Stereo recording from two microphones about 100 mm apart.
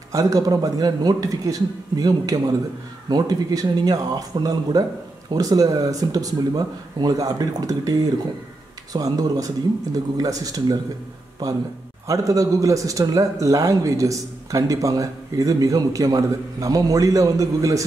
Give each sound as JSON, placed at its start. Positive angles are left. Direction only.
{"t": 0.1, "sound": "a man's voice", "side_deg": -35}
{"t": 12.1, "sound": "a man's voice", "side_deg": -35}